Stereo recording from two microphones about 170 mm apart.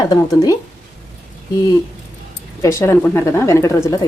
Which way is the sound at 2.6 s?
20° left (ahead or behind).